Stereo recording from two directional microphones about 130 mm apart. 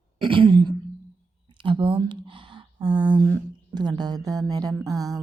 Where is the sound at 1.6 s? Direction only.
40° right (ahead or behind).